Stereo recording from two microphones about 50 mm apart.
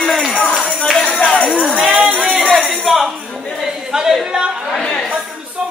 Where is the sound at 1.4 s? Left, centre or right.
Centre.